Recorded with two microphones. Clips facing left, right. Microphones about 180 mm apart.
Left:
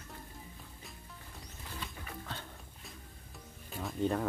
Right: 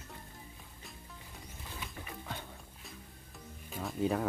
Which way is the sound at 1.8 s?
15° right (ahead or behind).